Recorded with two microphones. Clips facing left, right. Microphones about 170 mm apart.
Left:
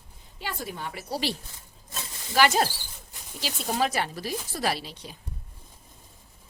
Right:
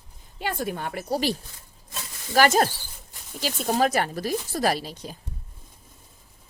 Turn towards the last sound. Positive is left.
turn(degrees=-45)  # may be behind; listen again after turning